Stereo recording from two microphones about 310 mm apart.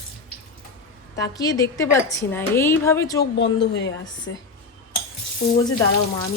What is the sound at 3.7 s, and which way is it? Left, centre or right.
Speech, left.